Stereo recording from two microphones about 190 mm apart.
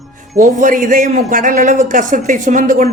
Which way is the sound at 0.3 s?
45° right (ahead or behind).